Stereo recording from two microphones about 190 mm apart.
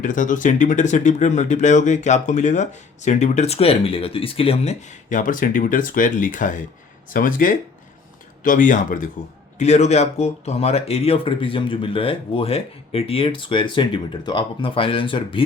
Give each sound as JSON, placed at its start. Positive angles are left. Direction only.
{"t": 0.0, "sound": "speech", "side_deg": 45}